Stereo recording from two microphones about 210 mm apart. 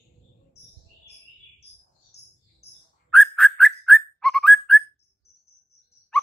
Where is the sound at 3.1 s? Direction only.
Centre (ahead or behind).